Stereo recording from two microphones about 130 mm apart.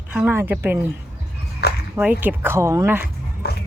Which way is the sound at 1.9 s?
10° right (ahead or behind).